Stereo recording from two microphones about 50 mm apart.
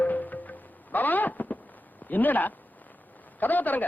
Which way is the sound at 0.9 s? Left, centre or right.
Left.